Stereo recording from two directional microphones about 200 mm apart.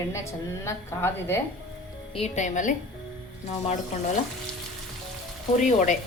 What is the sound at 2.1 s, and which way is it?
Speech, 35° left (ahead or behind).